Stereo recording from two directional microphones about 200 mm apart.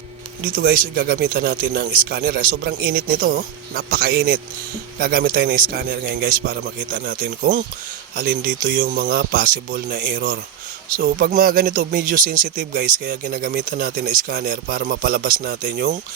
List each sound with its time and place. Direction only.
0.4 s speech: 45° right (ahead or behind)